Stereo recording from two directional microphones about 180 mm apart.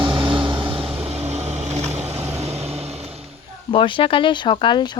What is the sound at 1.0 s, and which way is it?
Vehicle, 35° right (ahead or behind).